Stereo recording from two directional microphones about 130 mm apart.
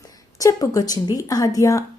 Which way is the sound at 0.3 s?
25° left (ahead or behind).